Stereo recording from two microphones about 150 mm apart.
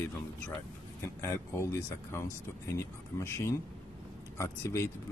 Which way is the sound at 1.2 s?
20° left (ahead or behind).